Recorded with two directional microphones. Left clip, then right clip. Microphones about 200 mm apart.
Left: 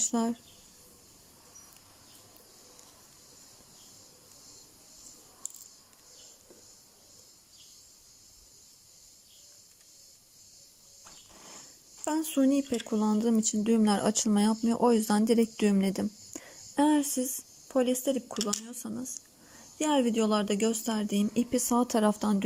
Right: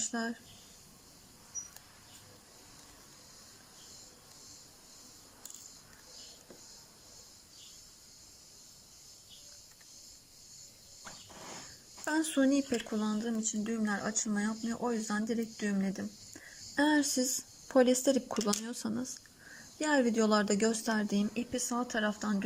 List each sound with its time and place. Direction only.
0.0 s speech: 20° left (ahead or behind)
12.0 s speech: 10° left (ahead or behind)
19.8 s speech: 10° left (ahead or behind)
21.5 s speech: 25° left (ahead or behind)